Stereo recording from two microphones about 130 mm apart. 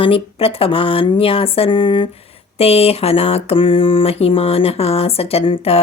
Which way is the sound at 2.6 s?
50° left (ahead or behind).